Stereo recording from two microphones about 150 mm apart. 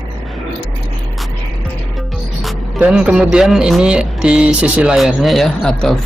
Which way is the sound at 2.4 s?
5° right (ahead or behind).